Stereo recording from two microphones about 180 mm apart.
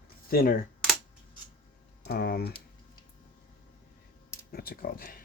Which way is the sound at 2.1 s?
60° left (ahead or behind).